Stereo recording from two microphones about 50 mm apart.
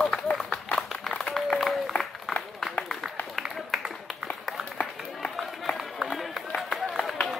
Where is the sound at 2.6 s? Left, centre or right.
Centre.